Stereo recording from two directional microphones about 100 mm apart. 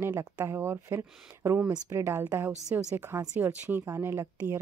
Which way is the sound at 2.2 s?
15° right (ahead or behind).